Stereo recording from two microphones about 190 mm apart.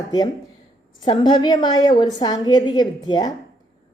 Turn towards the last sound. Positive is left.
turn(degrees=20)  # may be behind; listen again after turning